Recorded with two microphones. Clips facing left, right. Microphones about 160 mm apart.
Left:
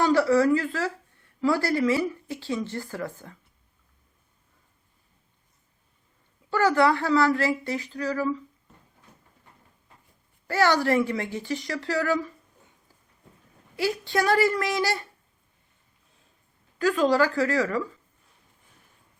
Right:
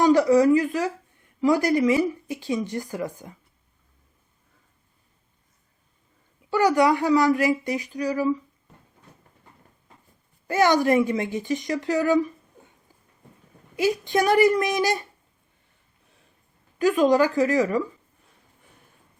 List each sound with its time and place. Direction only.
0.0 s speech: 15° right (ahead or behind)
6.5 s speech: 15° right (ahead or behind)
10.4 s speech: 20° right (ahead or behind)
13.7 s speech: 20° right (ahead or behind)
16.7 s speech: 20° right (ahead or behind)